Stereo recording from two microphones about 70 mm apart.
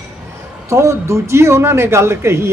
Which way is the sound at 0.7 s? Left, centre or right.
Right.